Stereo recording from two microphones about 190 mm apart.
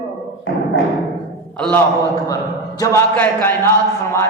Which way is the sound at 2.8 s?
15° left (ahead or behind).